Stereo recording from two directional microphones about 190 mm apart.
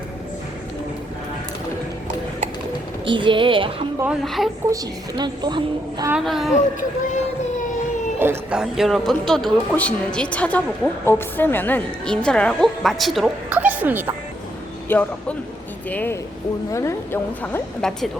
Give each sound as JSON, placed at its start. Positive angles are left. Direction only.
{"t": 3.1, "sound": "a woman's voice", "side_deg": -25}
{"t": 4.0, "sound": "a woman's voice", "side_deg": -5}
{"t": 4.7, "sound": "a woman's voice", "side_deg": -20}
{"t": 6.1, "sound": "a woman's voice", "side_deg": -5}
{"t": 6.6, "sound": "speech", "side_deg": 40}
{"t": 8.2, "sound": "a woman's voice", "side_deg": -10}
{"t": 14.8, "sound": "speech", "side_deg": 10}